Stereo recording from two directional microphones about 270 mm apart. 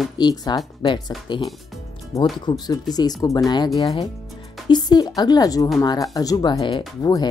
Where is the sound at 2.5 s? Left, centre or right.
Centre.